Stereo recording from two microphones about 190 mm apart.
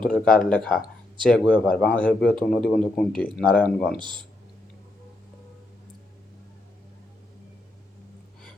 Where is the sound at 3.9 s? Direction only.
25° right (ahead or behind).